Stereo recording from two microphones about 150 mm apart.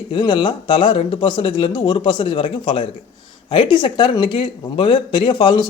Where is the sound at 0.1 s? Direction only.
35° left (ahead or behind).